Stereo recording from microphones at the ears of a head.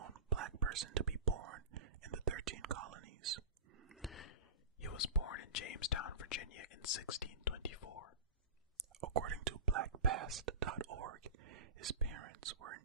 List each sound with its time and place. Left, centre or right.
0.0 s whispering: right
4.8 s whispering: left
8.7 s whispering: right